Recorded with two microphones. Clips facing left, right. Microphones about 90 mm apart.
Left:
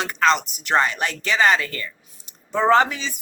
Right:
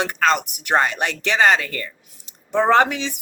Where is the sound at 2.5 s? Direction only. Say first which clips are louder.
Right 1 dB; 65° right (ahead or behind).